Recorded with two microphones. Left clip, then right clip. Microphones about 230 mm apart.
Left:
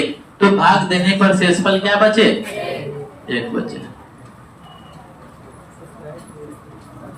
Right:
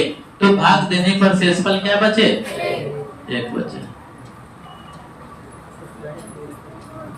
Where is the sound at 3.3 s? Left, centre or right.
Centre.